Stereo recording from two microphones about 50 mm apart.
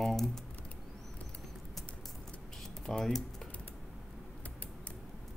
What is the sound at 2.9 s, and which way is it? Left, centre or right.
Speech, centre.